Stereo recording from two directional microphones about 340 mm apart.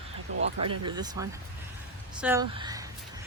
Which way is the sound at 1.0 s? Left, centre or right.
Centre.